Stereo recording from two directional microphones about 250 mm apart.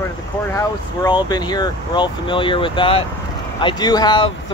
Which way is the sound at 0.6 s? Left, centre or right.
Centre.